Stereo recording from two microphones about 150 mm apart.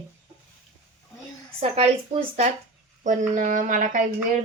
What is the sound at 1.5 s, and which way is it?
Speech, 40° right (ahead or behind).